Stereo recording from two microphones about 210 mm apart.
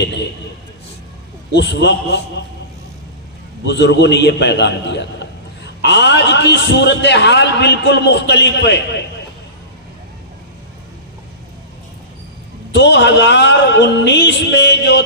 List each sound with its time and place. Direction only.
1.5 s a man's voice: 55° left (ahead or behind)
3.6 s a man's voice: 55° left (ahead or behind)
12.7 s a man's voice: 55° left (ahead or behind)